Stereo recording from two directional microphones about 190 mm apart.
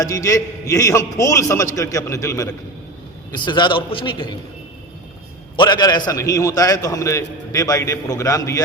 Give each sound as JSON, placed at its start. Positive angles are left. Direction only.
{"t": 0.0, "sound": "a man's voice", "side_deg": 20}
{"t": 5.5, "sound": "a man's voice", "side_deg": 20}